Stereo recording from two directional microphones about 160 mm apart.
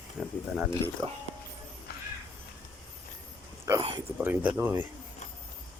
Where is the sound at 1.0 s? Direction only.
25° right (ahead or behind).